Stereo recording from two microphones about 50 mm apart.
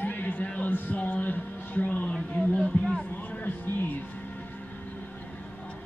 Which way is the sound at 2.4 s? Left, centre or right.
Centre.